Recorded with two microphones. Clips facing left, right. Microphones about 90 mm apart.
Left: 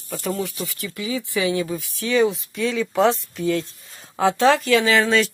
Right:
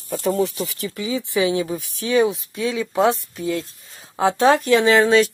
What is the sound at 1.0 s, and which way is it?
Speech, 20° right (ahead or behind).